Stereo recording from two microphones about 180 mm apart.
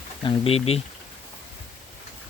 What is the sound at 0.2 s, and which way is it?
Speech, 30° left (ahead or behind).